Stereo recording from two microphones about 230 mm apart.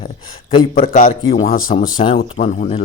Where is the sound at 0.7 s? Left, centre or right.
Left.